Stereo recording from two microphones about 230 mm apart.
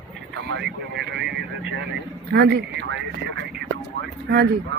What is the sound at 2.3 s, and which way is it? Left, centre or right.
Speech, right.